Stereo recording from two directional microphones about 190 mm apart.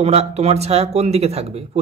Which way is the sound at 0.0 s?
35° right (ahead or behind).